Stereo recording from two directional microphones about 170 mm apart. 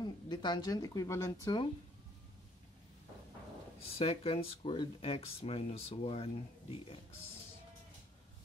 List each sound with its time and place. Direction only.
0.0 s speech: 25° left (ahead or behind)
4.0 s speech: 35° left (ahead or behind)